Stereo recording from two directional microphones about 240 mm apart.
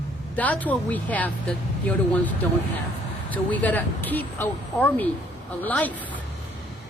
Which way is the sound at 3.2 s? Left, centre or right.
Centre.